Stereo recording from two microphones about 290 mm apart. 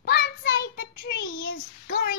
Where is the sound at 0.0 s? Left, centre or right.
Left.